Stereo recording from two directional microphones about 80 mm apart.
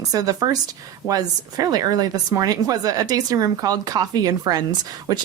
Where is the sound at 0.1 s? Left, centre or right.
Right.